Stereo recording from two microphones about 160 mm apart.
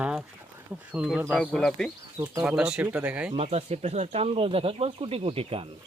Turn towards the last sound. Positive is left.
turn(degrees=-35)  # may be behind; listen again after turning